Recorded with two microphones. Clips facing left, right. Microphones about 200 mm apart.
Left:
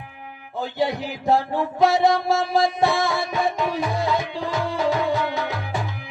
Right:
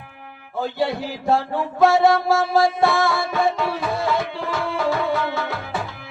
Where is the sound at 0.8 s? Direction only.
15° left (ahead or behind).